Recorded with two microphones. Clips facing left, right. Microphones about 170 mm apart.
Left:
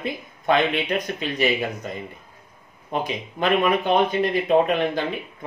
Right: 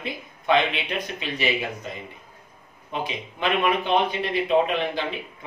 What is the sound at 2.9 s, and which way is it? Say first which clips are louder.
Speech: left 4 dB; 45° left (ahead or behind).